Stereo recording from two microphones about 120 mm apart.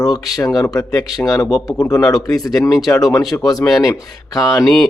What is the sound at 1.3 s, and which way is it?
Speech, 30° left (ahead or behind).